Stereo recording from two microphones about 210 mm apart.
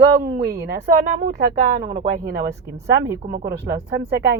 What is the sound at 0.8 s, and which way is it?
Speech, 35° right (ahead or behind).